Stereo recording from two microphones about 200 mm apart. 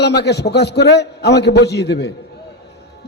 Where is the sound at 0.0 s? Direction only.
55° left (ahead or behind).